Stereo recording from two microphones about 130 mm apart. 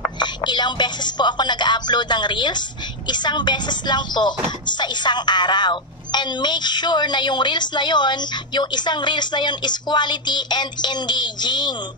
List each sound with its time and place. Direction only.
0.2 s a woman's voice: 35° left (ahead or behind)